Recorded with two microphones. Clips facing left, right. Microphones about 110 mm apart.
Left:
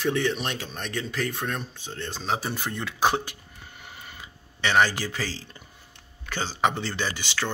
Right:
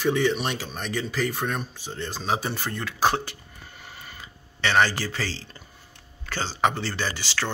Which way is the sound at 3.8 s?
15° left (ahead or behind).